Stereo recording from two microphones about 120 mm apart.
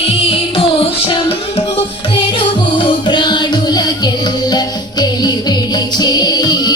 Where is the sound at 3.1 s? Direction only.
40° left (ahead or behind).